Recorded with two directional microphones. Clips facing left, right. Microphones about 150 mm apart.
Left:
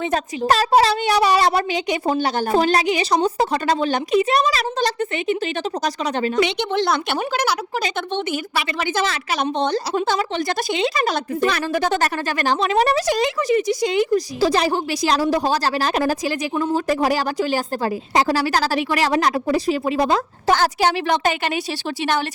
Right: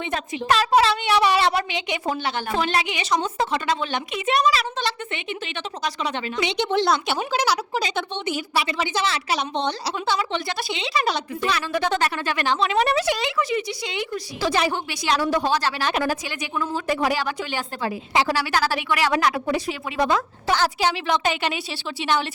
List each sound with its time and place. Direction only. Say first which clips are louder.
0.1 s a woman's voice: left 1 dB; 40° left (ahead or behind)
7.1 s a woman's voice: left 1 dB; 50° left (ahead or behind)